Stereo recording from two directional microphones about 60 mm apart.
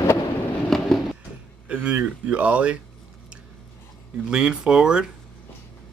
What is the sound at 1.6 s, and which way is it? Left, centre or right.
Speech, right.